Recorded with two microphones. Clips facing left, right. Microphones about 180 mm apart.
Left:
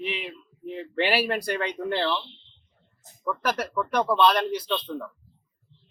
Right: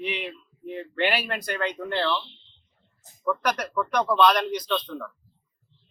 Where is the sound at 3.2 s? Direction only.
5° left (ahead or behind).